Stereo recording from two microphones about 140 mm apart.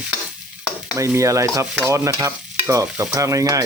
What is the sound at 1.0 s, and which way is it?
Speech, 20° right (ahead or behind).